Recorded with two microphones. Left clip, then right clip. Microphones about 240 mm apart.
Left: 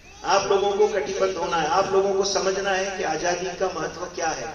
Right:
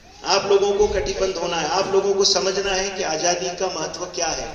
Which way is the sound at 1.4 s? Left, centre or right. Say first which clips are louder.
Even; right.